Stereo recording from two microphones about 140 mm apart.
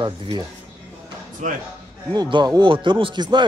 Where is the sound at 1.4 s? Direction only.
65° right (ahead or behind).